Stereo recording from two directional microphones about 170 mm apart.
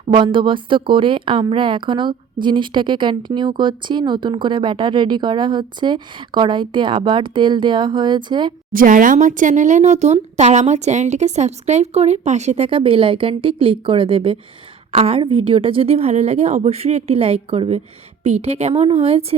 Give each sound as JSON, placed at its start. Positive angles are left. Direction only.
{"t": 0.1, "sound": "a woman's voice", "side_deg": -30}
{"t": 8.7, "sound": "a woman's voice", "side_deg": -55}